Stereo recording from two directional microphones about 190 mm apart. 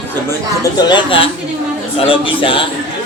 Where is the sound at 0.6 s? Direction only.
20° left (ahead or behind).